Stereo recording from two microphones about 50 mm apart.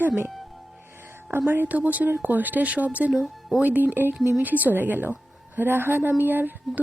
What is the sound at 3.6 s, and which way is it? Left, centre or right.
Speech, right.